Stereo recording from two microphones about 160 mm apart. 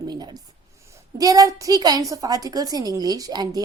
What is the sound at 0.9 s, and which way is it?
A woman's voice, 20° right (ahead or behind).